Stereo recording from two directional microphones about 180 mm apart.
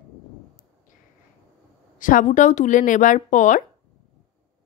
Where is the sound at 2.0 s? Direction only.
45° left (ahead or behind).